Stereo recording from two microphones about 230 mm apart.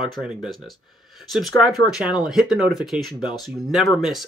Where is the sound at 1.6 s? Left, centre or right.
Centre.